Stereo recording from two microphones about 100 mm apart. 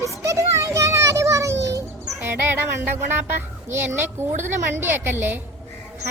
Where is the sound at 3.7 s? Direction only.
25° right (ahead or behind).